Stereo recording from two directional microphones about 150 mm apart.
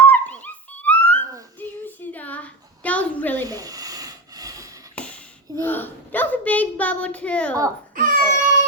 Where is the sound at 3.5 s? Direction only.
25° right (ahead or behind).